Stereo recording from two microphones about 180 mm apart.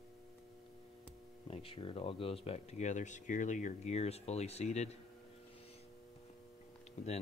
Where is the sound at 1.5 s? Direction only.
30° left (ahead or behind).